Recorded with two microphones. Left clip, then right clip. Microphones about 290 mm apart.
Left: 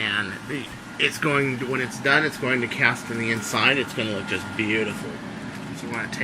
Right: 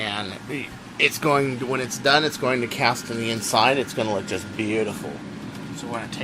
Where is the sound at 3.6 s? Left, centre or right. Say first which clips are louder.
Right 2 dB; right.